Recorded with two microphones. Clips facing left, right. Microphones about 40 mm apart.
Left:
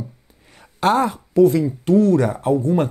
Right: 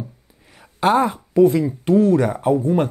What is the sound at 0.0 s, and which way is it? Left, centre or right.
Speech, centre.